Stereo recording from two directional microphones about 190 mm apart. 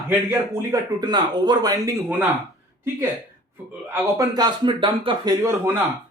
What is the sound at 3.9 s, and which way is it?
A man's voice, 20° right (ahead or behind).